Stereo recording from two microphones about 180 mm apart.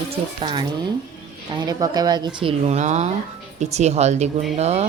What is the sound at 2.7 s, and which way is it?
Speech, 40° right (ahead or behind).